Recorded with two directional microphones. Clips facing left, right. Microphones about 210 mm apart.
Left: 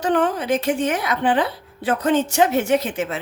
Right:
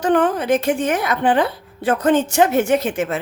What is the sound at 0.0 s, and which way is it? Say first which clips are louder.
Speech: right 3 dB; 50° right (ahead or behind).